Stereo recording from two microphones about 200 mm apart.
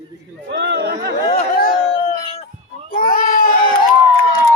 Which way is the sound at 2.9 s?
45° left (ahead or behind).